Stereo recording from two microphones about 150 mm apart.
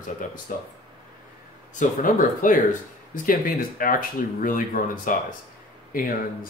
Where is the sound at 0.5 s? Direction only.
65° left (ahead or behind).